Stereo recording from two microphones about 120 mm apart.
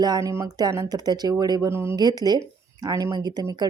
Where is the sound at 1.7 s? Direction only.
20° right (ahead or behind).